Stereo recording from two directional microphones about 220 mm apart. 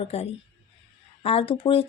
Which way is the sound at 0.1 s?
25° left (ahead or behind).